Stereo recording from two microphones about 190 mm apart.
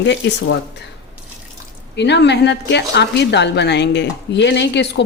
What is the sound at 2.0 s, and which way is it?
A woman's voice, 65° left (ahead or behind).